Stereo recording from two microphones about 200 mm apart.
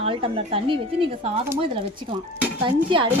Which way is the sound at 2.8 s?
25° right (ahead or behind).